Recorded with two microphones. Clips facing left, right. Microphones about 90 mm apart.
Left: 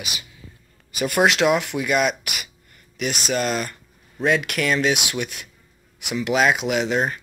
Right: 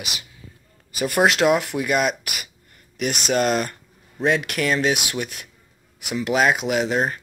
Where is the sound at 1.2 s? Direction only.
40° right (ahead or behind).